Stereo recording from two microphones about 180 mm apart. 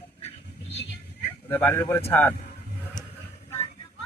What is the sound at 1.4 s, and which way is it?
Speech, 15° left (ahead or behind).